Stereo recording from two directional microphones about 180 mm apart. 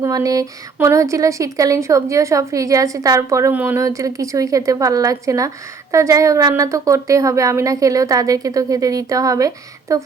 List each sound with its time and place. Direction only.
0.0 s speech: 20° right (ahead or behind)